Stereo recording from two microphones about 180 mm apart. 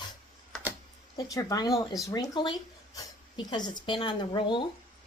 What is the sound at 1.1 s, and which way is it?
Speech, 20° left (ahead or behind).